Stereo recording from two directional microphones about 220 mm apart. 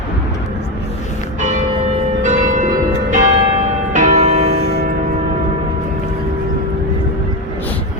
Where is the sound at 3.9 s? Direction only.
35° right (ahead or behind).